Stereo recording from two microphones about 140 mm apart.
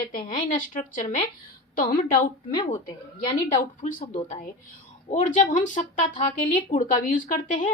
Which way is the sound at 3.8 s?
70° left (ahead or behind).